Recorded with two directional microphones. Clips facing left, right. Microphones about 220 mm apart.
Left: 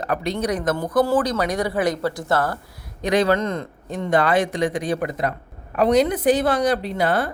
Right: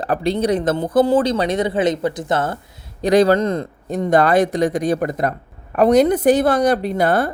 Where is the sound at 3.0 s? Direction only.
35° right (ahead or behind).